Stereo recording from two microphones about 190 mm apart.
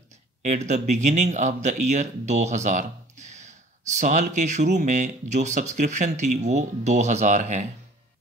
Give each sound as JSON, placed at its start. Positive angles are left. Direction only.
{"t": 0.4, "sound": "speech", "side_deg": -40}